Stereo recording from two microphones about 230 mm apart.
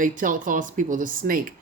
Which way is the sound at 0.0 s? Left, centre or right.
Right.